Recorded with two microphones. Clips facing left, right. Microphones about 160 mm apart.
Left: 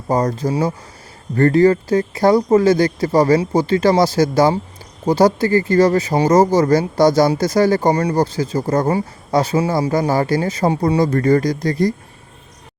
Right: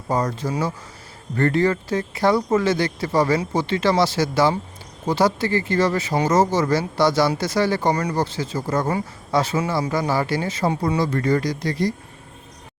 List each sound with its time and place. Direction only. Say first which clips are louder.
0.1 s speech: left 5 dB; 40° left (ahead or behind)